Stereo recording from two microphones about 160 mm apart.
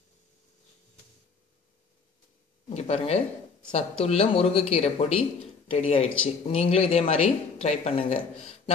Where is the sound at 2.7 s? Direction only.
40° left (ahead or behind).